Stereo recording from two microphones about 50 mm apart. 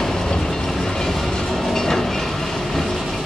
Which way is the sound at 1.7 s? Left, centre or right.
Centre.